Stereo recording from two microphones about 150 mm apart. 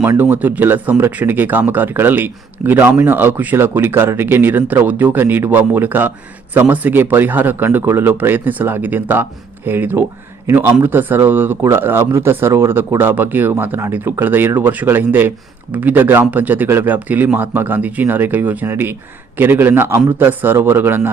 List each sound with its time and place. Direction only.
0.0 s speech: 15° right (ahead or behind)